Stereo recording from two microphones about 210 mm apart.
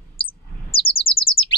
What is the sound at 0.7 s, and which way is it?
Chirp, 25° left (ahead or behind).